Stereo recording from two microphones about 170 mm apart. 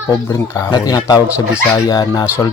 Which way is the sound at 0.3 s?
20° left (ahead or behind).